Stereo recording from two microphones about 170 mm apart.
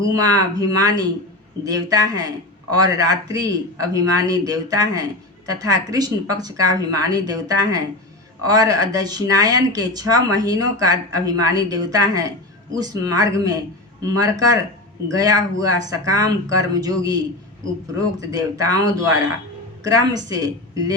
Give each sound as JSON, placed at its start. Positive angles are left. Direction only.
{"t": 0.1, "sound": "speech", "side_deg": -20}
{"t": 18.2, "sound": "speech", "side_deg": -20}